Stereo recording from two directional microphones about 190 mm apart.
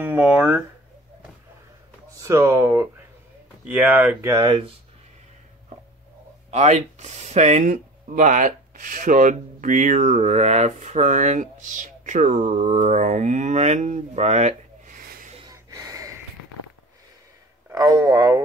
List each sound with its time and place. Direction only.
0.0 s speech: 5° right (ahead or behind)
2.1 s speech: 15° right (ahead or behind)
6.5 s speech: 35° right (ahead or behind)
15.5 s a sound: 20° right (ahead or behind)
17.6 s speech: 20° right (ahead or behind)